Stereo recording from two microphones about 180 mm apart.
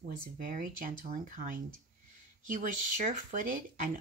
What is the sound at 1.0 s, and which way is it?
Speech, 45° right (ahead or behind).